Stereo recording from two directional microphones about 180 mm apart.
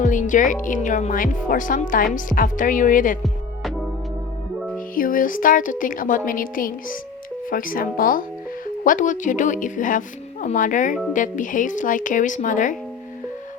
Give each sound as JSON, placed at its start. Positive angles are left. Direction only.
{"t": 0.0, "sound": "speech", "side_deg": 45}
{"t": 4.9, "sound": "speech", "side_deg": 50}